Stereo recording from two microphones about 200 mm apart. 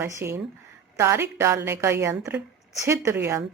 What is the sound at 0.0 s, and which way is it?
A woman's voice, 10° right (ahead or behind).